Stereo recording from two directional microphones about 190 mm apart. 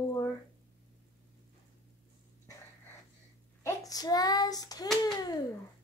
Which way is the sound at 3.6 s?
20° left (ahead or behind).